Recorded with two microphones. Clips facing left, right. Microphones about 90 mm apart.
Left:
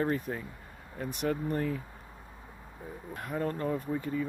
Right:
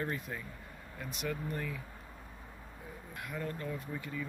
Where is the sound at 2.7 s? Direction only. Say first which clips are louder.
Left 6 dB; 20° left (ahead or behind).